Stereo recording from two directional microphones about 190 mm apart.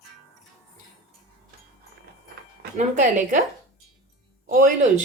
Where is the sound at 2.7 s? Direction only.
40° right (ahead or behind).